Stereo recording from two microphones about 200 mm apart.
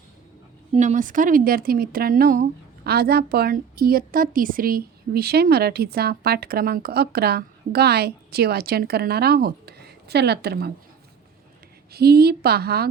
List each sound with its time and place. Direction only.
0.7 s speech: 35° right (ahead or behind); by 10.7 s 55° right (ahead or behind)
11.9 s speech: 50° right (ahead or behind)